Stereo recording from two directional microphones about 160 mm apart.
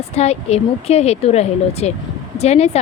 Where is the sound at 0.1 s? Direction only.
40° left (ahead or behind).